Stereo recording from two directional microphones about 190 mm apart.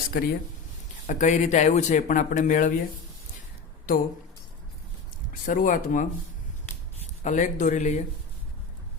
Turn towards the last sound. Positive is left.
turn(degrees=40)  # may be behind; listen again after turning